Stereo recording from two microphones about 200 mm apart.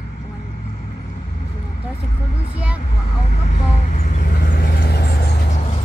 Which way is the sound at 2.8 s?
40° left (ahead or behind).